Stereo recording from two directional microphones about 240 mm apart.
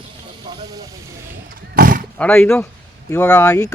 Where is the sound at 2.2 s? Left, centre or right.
Centre.